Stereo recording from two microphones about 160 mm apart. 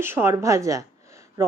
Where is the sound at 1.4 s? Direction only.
20° right (ahead or behind).